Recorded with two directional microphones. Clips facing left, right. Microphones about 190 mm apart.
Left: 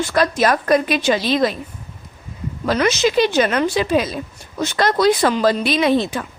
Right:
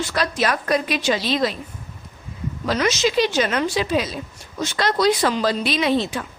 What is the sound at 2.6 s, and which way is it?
A woman's voice, 55° left (ahead or behind).